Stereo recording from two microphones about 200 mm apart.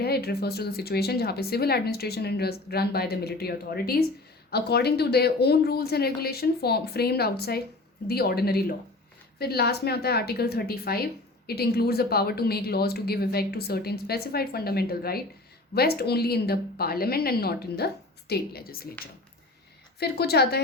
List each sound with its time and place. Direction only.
0.0 s a woman's voice: 50° left (ahead or behind)
20.0 s a woman's voice: 55° left (ahead or behind)